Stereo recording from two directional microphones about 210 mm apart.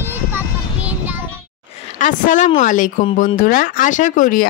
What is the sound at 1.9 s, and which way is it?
Speech, 35° left (ahead or behind).